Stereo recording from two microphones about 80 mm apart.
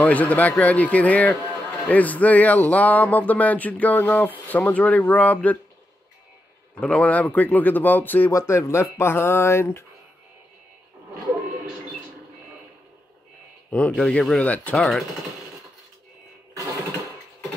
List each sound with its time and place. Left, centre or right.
0.0 s speech: centre
6.7 s speech: centre
8.3 s speech: left
13.7 s speech: centre
14.8 s speech: centre